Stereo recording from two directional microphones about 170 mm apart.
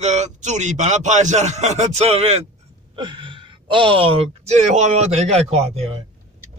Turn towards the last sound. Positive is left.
turn(degrees=-35)  # may be behind; listen again after turning